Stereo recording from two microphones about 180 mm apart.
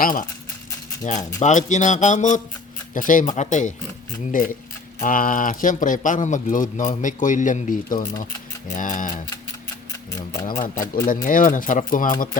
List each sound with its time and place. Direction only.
0.0 s speech: 50° left (ahead or behind)
10.1 s speech: 15° left (ahead or behind)
11.0 s speech: 50° left (ahead or behind)